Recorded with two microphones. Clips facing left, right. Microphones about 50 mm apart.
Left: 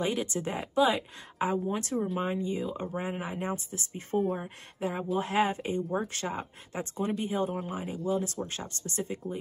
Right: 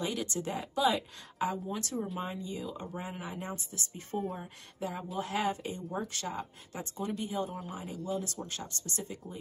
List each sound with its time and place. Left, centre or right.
0.0 s speech: left